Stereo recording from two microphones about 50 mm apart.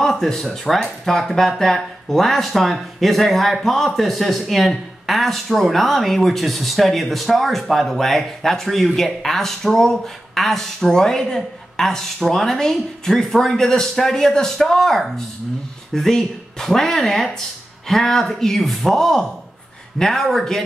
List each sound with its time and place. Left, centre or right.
0.0 s speech: centre